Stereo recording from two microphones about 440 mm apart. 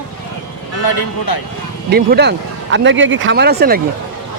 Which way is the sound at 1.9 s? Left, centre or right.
Right.